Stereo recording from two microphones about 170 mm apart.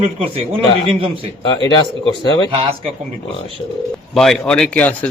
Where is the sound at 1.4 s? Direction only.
25° left (ahead or behind).